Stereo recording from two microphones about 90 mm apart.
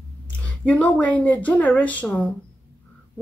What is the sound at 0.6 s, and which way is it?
A woman's voice, 15° left (ahead or behind).